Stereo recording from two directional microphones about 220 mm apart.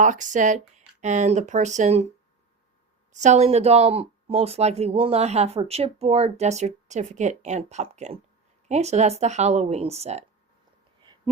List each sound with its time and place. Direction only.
0.0 s speech: 35° right (ahead or behind)
3.1 s speech: 30° right (ahead or behind)